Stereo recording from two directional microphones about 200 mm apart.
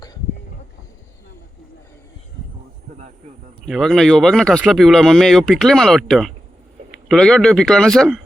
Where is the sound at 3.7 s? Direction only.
Centre (ahead or behind).